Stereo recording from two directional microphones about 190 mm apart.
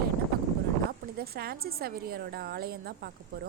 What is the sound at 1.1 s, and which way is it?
A woman's voice, 55° right (ahead or behind).